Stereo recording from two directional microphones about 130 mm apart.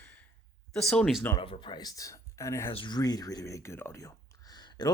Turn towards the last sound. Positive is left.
turn(degrees=30)  # may be behind; listen again after turning